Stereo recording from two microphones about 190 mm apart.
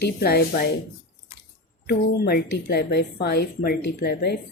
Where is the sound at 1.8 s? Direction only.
55° left (ahead or behind).